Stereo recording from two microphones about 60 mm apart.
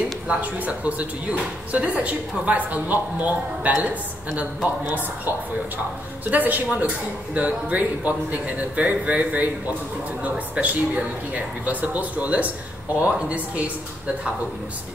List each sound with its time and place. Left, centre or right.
0.3 s speech: right
6.3 s speech: right